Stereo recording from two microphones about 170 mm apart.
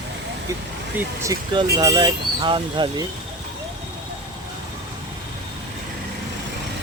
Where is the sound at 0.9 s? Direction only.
15° right (ahead or behind).